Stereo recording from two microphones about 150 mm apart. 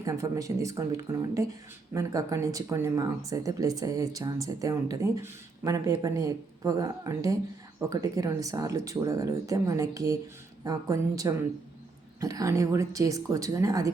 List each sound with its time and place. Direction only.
0.0 s speech: 20° right (ahead or behind)